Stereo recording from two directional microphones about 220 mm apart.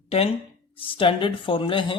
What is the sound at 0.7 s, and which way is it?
Speech, 25° left (ahead or behind).